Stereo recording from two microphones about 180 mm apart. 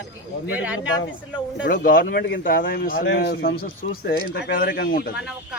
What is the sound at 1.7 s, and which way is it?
Speech, 55° left (ahead or behind).